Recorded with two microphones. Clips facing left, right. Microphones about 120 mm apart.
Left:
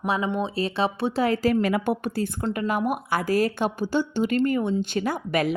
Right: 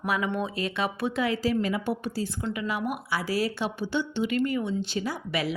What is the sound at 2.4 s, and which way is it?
A woman's voice, 45° left (ahead or behind).